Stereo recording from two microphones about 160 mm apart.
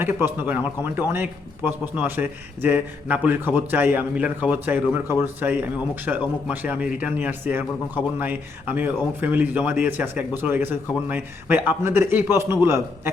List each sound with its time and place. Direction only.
0.0 s a man's voice: 15° right (ahead or behind)